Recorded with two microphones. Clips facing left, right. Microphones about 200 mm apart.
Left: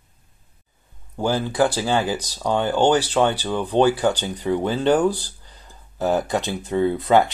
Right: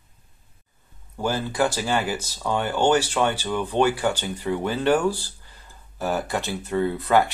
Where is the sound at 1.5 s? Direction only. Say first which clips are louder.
Left 3 dB; 15° left (ahead or behind).